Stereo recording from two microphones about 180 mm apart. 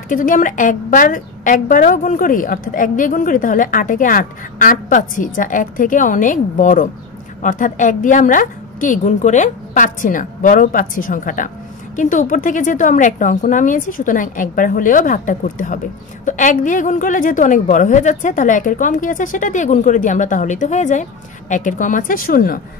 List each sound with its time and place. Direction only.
0.1 s a woman's voice: 45° left (ahead or behind)